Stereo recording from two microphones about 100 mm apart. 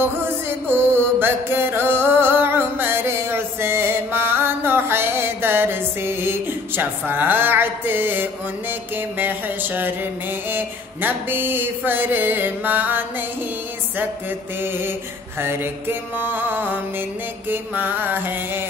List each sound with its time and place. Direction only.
0.7 s music: 20° right (ahead or behind)
10.5 s mantra: 20° right (ahead or behind)
15.4 s mantra: 20° right (ahead or behind)